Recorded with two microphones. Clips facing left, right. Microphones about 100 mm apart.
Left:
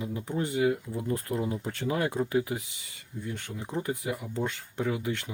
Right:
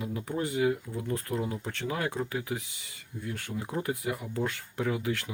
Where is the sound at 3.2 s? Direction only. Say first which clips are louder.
Right 1 dB; 5° right (ahead or behind).